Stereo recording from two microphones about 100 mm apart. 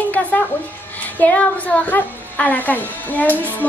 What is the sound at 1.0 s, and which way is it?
A woman's voice, 15° left (ahead or behind).